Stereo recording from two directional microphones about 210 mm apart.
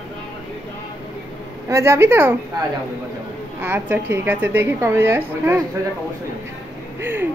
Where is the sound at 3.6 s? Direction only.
10° right (ahead or behind).